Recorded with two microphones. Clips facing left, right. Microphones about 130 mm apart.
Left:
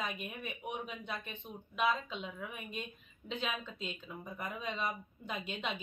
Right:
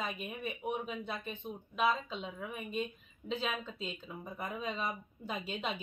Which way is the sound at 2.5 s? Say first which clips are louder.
Right 6 dB; 35° right (ahead or behind).